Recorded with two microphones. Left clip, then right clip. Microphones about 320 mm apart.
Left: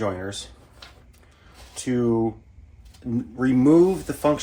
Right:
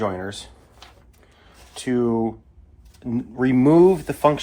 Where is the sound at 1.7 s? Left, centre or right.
Centre.